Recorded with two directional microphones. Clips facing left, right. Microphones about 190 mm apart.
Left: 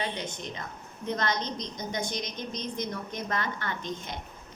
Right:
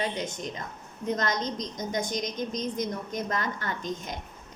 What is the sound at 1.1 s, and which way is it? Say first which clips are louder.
A woman's voice: right 1 dB; 40° right (ahead or behind).